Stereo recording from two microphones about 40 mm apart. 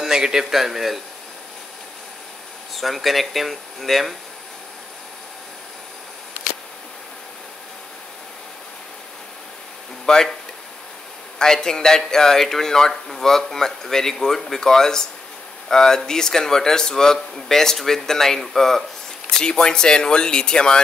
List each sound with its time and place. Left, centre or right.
0.0 s a man's voice: centre
2.7 s speech: centre
10.0 s speech: centre
11.3 s speech: centre
19.3 s speech: left